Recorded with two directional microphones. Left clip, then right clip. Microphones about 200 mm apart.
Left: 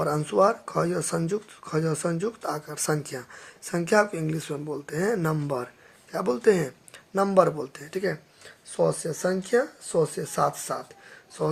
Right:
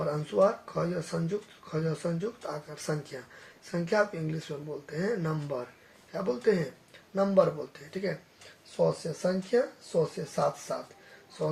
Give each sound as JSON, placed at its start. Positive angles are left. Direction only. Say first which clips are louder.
{"t": 0.0, "sound": "speech", "louder": "left 4 dB", "side_deg": 45}
{"t": 8.7, "sound": "speech", "louder": "left 3 dB", "side_deg": 50}